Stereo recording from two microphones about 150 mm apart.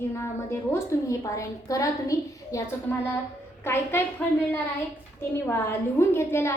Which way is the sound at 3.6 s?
15° left (ahead or behind).